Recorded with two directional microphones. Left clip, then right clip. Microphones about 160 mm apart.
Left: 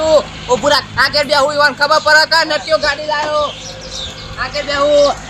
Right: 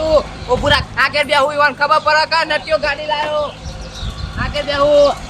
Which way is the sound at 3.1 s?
10° right (ahead or behind).